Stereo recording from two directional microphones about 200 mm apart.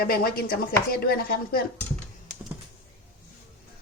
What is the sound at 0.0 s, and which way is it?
A woman's voice, 50° left (ahead or behind).